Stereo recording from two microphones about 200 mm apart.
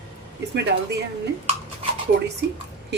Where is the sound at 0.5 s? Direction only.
55° right (ahead or behind).